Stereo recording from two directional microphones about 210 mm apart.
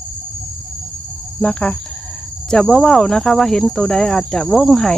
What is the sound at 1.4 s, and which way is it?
Cricket, 5° left (ahead or behind).